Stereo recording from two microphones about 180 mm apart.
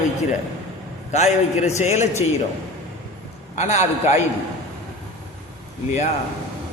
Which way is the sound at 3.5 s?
40° left (ahead or behind).